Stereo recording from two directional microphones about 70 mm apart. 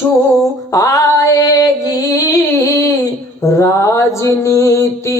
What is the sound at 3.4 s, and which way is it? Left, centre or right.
Mantra, left.